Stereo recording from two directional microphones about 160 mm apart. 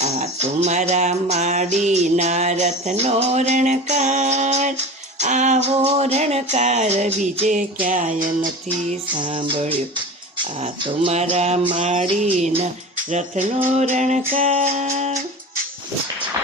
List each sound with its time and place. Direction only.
0.0 s music: 45° right (ahead or behind)
9.1 s music: 30° right (ahead or behind)
10.8 s music: 40° right (ahead or behind)